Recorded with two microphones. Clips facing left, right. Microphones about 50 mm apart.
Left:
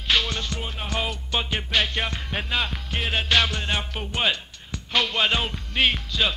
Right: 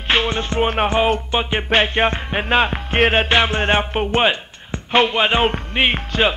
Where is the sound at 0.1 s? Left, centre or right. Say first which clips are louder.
Right 6 dB; right.